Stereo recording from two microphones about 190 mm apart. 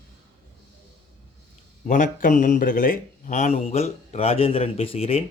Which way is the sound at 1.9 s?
40° left (ahead or behind).